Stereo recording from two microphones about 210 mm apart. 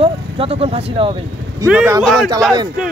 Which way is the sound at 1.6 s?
10° right (ahead or behind).